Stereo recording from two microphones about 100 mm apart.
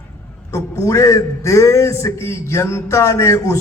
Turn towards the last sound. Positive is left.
turn(degrees=30)  # may be behind; listen again after turning